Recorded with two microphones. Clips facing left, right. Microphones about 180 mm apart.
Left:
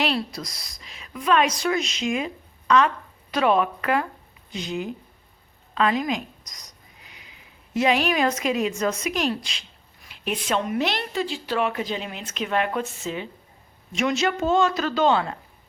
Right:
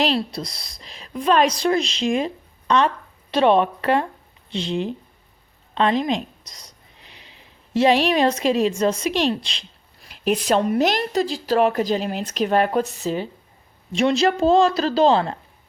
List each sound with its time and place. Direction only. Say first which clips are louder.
0.0 s a woman's voice: right 4 dB; 30° right (ahead or behind)